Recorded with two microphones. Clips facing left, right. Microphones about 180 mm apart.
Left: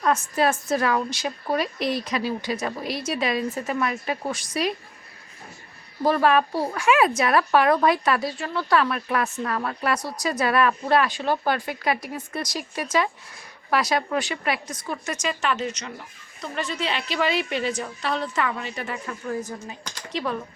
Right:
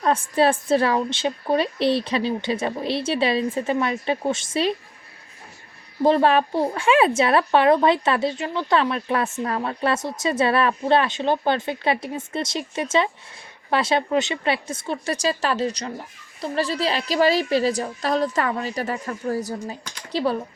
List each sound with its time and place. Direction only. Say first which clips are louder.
0.0 s a woman's voice: right 3 dB; 30° right (ahead or behind)
6.0 s a woman's voice: right 3 dB; 25° right (ahead or behind)